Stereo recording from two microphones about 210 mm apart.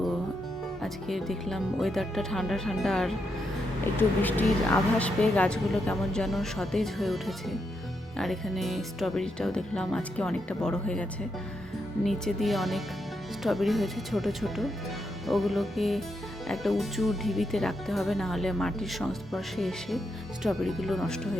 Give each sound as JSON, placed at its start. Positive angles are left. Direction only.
{"t": 0.8, "sound": "a woman's voice", "side_deg": 0}
{"t": 12.0, "sound": "a woman's voice", "side_deg": 0}